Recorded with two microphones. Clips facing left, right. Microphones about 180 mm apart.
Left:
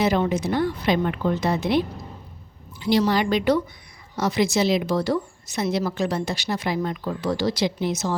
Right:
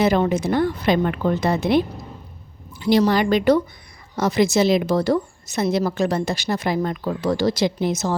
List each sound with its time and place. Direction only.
0.0 s a woman's voice: 50° right (ahead or behind)